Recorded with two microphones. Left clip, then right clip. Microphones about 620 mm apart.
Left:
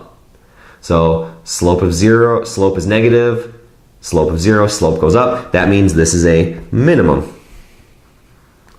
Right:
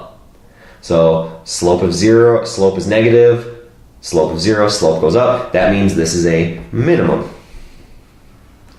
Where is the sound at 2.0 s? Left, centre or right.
Left.